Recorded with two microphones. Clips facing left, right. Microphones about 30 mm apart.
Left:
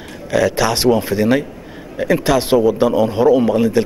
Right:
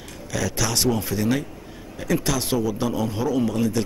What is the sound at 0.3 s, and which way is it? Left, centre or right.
A man's voice, left.